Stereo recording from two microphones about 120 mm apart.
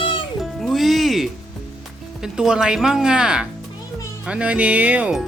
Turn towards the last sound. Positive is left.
turn(degrees=-10)  # may be behind; listen again after turning